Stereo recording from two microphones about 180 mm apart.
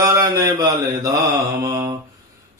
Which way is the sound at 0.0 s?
20° right (ahead or behind).